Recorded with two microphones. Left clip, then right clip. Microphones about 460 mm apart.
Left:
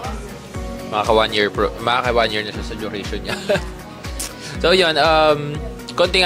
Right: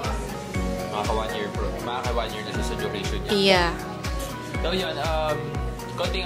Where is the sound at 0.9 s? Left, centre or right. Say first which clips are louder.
Left 12 dB; left.